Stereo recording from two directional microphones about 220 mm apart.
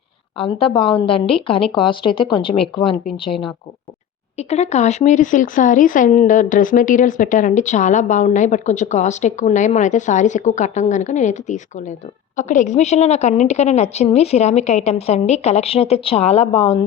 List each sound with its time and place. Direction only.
0.3 s a woman's voice: 25° left (ahead or behind)